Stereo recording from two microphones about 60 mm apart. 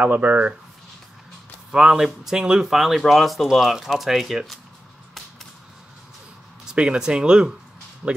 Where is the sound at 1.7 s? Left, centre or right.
Centre.